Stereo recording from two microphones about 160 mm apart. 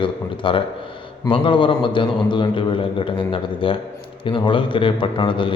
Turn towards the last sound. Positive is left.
turn(degrees=30)  # may be behind; listen again after turning